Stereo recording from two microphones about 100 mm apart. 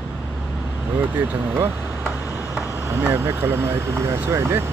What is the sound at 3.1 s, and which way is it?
Speech, 30° right (ahead or behind).